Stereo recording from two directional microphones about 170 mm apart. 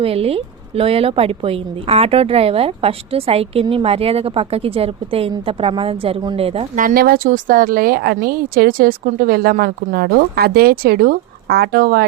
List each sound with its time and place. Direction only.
0.0 s speech: 35° right (ahead or behind)
6.7 s a woman's voice: 55° right (ahead or behind)